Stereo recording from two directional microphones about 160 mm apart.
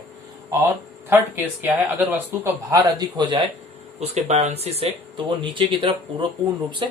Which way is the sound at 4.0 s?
45° right (ahead or behind).